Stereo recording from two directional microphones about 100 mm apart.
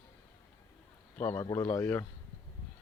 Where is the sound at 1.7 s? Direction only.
20° left (ahead or behind).